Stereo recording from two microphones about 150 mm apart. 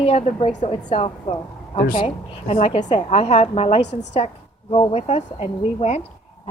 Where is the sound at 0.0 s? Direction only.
50° left (ahead or behind).